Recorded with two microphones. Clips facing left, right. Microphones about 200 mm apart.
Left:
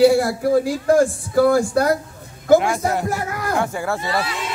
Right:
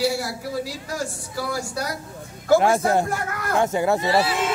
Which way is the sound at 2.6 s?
35° right (ahead or behind).